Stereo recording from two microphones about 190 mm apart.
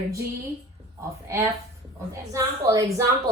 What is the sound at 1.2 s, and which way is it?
A woman's voice, 15° right (ahead or behind).